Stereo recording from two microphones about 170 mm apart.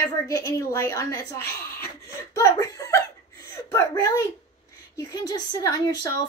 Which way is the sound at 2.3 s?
20° left (ahead or behind).